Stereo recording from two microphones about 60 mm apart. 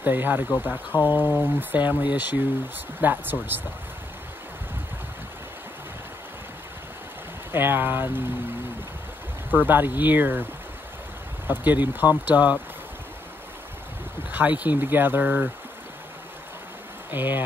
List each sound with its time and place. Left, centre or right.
0.0 s speech: right
7.5 s speech: right
9.5 s speech: right
11.4 s speech: right
14.3 s speech: right
17.1 s speech: right